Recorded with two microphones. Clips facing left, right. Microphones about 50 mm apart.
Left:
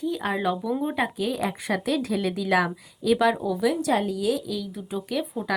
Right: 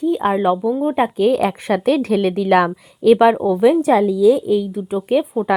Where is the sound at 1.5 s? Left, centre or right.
Right.